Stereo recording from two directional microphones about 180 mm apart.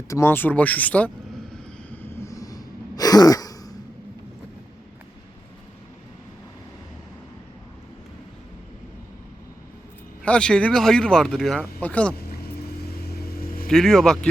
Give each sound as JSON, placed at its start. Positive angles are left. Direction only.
{"t": 0.1, "sound": "speech", "side_deg": 15}
{"t": 1.9, "sound": "sigh", "side_deg": 10}
{"t": 10.2, "sound": "speech", "side_deg": 5}
{"t": 13.0, "sound": "vehicle", "side_deg": 60}
{"t": 13.7, "sound": "speech", "side_deg": 5}